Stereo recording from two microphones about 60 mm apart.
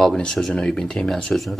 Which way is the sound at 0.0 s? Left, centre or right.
Centre.